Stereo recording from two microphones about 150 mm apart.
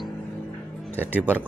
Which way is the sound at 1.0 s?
10° right (ahead or behind).